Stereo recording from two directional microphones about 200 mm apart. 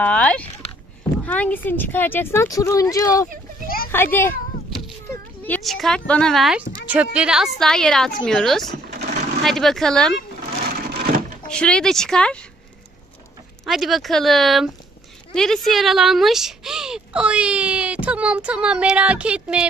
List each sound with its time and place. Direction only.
0.0 s speech: 5° left (ahead or behind)
3.6 s a sound: 45° left (ahead or behind)
3.9 s speech: 10° left (ahead or behind)
5.5 s speech: centre (ahead or behind)
10.9 s a sound: 45° right (ahead or behind)
11.4 s speech: 5° left (ahead or behind)
13.7 s speech: centre (ahead or behind)